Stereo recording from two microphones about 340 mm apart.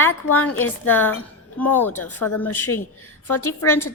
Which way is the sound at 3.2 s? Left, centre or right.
Left.